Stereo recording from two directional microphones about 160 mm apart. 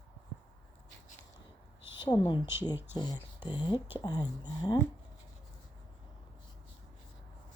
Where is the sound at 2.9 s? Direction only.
25° left (ahead or behind).